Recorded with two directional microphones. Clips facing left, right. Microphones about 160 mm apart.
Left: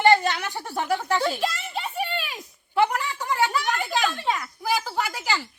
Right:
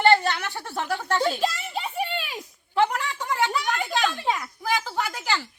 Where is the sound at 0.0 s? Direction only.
15° left (ahead or behind).